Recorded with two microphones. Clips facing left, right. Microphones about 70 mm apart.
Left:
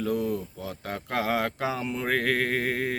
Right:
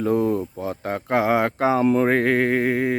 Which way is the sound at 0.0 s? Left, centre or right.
Right.